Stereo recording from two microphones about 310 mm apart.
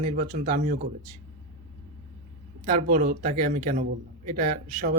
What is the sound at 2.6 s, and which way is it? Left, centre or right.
A man's voice, right.